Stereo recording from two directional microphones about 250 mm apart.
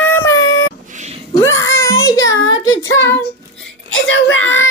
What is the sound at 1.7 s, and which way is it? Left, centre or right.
Child singing, centre.